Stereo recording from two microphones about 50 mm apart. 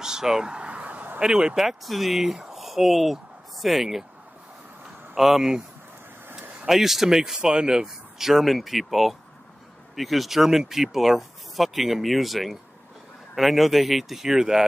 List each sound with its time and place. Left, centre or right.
0.0 s a sound: centre; by 1.2 s right
1.2 s speech: centre
5.1 s speech: centre
6.6 s speech: centre